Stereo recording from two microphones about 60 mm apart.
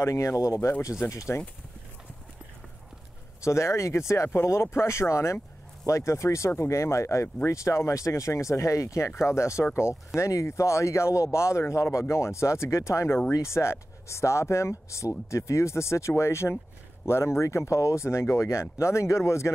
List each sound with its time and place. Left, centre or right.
0.0 s speech: left
1.3 s speech: left
3.4 s speech: left